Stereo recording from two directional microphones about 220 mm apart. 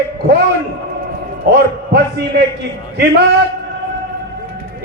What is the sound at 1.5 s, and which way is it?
Speech, 50° right (ahead or behind).